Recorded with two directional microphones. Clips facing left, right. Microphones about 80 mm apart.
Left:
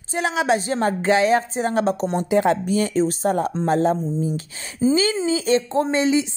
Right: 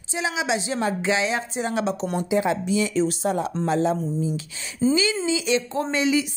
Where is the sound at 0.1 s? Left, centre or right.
Left.